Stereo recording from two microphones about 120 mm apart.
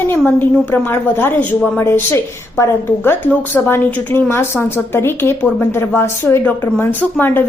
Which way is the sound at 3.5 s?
15° left (ahead or behind).